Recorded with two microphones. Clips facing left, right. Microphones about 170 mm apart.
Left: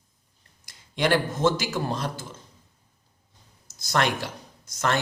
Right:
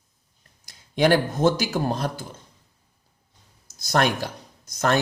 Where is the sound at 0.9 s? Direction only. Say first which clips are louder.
Right 4 dB; 40° right (ahead or behind).